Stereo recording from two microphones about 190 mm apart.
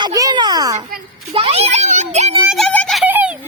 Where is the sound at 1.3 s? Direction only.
30° right (ahead or behind).